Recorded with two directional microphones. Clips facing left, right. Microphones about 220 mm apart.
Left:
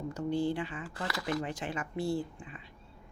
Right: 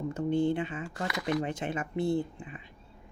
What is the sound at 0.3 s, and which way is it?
A woman's voice, 20° right (ahead or behind).